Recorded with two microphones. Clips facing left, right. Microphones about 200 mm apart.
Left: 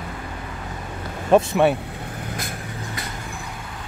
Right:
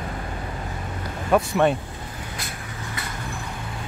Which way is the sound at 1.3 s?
25° left (ahead or behind).